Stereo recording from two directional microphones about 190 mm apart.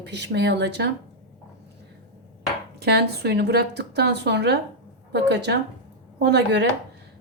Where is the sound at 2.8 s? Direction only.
60° right (ahead or behind).